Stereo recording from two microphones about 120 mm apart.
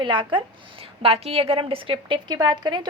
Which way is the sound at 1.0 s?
55° right (ahead or behind).